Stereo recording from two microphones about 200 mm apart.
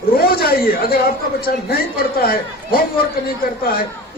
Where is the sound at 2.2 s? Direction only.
50° left (ahead or behind).